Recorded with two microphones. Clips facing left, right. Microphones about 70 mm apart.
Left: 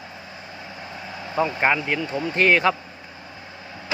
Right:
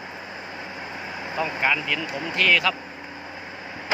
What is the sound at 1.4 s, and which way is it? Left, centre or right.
Speech, left.